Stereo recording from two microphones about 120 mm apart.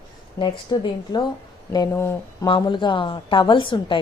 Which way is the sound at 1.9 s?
20° left (ahead or behind).